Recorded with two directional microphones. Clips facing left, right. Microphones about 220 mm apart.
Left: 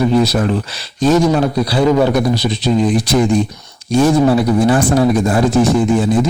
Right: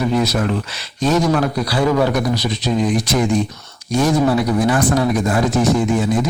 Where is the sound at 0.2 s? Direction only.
35° left (ahead or behind).